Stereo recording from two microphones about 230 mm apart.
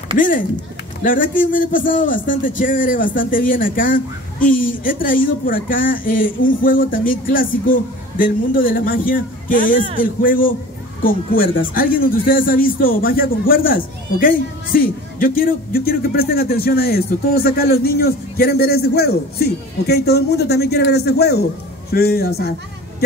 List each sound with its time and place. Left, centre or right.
1.0 s a man's voice: left